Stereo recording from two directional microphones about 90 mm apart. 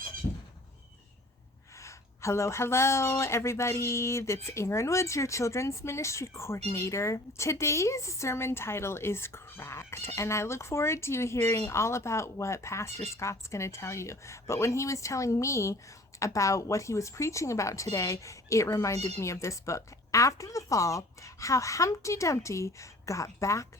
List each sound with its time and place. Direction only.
1.8 s speech: 35° left (ahead or behind)